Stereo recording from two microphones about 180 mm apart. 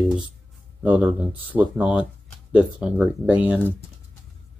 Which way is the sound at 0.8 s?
5° right (ahead or behind).